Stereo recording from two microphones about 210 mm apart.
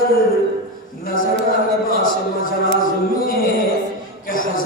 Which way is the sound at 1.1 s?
40° left (ahead or behind).